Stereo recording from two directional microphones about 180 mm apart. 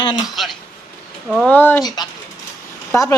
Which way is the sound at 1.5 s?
10° left (ahead or behind).